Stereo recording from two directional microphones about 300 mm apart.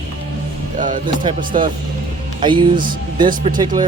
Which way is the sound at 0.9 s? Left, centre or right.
Right.